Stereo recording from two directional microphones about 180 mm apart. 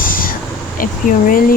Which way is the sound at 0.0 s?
50° left (ahead or behind).